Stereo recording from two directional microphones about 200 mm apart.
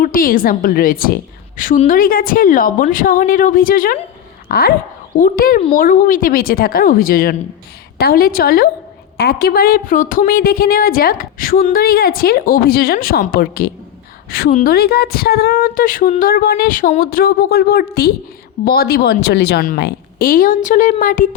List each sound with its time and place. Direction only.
0.0 s a woman's voice: 45° left (ahead or behind)